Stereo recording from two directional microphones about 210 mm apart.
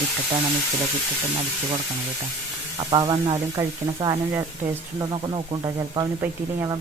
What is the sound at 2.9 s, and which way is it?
Speech, 20° right (ahead or behind).